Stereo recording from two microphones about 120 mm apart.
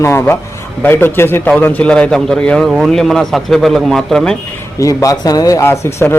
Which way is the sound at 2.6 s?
5° right (ahead or behind).